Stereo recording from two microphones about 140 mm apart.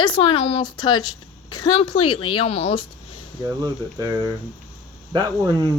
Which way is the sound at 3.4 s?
25° right (ahead or behind).